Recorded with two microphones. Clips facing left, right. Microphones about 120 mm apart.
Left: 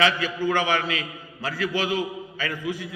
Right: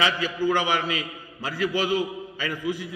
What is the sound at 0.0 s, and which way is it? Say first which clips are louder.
A man's voice: left 1 dB; 10° right (ahead or behind).